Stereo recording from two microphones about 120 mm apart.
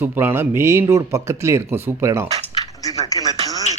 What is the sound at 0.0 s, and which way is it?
Speech, 15° right (ahead or behind).